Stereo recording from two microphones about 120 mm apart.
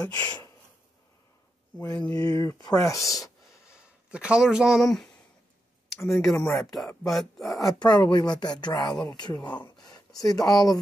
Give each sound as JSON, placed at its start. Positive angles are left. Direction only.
{"t": 0.0, "sound": "speech", "side_deg": 30}
{"t": 2.1, "sound": "speech", "side_deg": 35}
{"t": 3.6, "sound": "speech", "side_deg": -10}
{"t": 5.9, "sound": "speech", "side_deg": 25}
{"t": 6.2, "sound": "speech", "side_deg": 5}
{"t": 7.8, "sound": "speech", "side_deg": 35}
{"t": 9.8, "sound": "a sound", "side_deg": 35}